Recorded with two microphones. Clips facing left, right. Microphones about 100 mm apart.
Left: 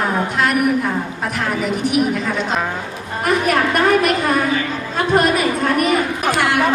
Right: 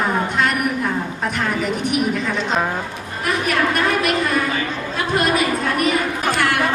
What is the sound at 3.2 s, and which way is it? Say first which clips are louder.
Speech: left 3 dB; 45° left (ahead or behind).